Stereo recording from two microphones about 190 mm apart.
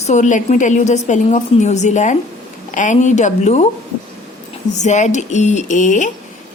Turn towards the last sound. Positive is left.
turn(degrees=40)  # may be behind; listen again after turning